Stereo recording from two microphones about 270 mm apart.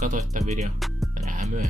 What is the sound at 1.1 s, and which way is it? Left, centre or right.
Music, right.